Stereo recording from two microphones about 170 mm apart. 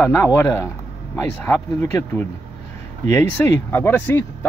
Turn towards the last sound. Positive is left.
turn(degrees=10)  # may be behind; listen again after turning